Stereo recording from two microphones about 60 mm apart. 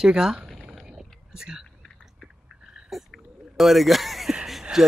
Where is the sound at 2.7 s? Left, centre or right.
Centre.